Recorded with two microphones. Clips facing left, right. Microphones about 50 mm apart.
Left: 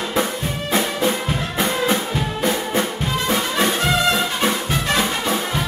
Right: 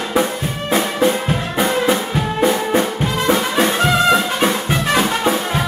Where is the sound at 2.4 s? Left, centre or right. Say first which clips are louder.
Right 5 dB; centre.